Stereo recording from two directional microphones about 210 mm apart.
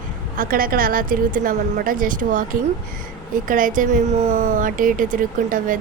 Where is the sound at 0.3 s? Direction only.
45° right (ahead or behind).